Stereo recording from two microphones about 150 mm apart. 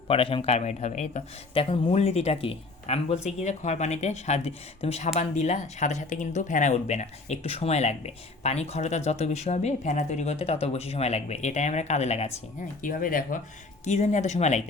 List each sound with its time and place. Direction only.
0.1 s speech: 35° left (ahead or behind)
1.5 s speech: 40° left (ahead or behind)
12.8 s speech: 65° left (ahead or behind)
13.8 s speech: 50° left (ahead or behind)